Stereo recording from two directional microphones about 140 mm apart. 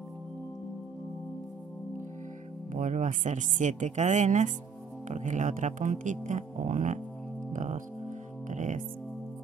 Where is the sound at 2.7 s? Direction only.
65° right (ahead or behind).